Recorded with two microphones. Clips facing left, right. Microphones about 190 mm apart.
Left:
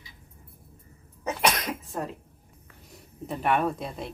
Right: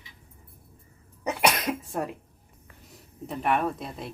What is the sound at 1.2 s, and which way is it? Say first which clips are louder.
Cough: right 2 dB; 10° right (ahead or behind).